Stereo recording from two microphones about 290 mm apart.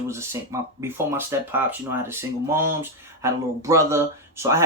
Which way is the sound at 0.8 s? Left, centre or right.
Centre.